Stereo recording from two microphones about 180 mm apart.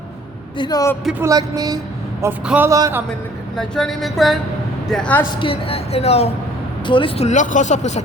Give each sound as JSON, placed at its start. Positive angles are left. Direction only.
{"t": 0.5, "sound": "a man's voice", "side_deg": 25}
{"t": 1.2, "sound": "music", "side_deg": -20}
{"t": 2.2, "sound": "a man's voice", "side_deg": -10}
{"t": 3.6, "sound": "a sound", "side_deg": 5}
{"t": 5.4, "sound": "speech", "side_deg": 30}